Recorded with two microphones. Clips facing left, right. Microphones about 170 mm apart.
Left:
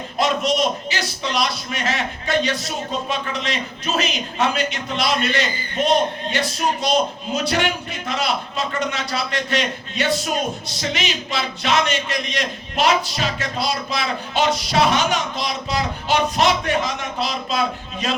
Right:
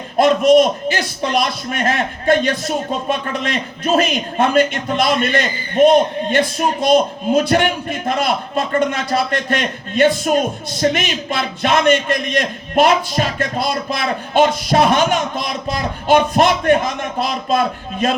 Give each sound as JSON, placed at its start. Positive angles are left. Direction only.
{"t": 0.2, "sound": "a man's voice", "side_deg": -50}